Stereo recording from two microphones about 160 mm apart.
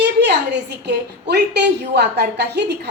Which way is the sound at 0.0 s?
90° right.